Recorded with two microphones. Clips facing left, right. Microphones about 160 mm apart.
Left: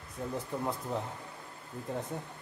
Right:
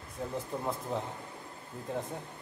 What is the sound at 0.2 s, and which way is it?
A man's voice, centre (ahead or behind).